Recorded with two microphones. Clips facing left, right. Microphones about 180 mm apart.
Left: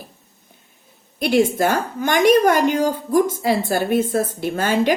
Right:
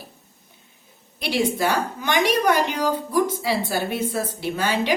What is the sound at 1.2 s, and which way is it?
A woman's voice, 50° left (ahead or behind).